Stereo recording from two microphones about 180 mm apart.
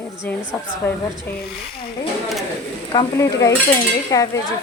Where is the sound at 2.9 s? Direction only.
20° left (ahead or behind).